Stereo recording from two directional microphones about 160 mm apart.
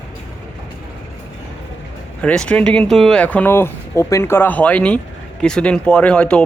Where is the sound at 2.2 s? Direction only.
5° left (ahead or behind).